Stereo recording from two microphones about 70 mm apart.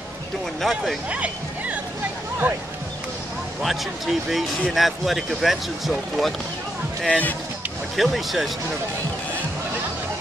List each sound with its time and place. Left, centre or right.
0.6 s speech: centre
1.1 s music: centre
3.6 s speech: centre
7.1 s speech: left
7.9 s speech: centre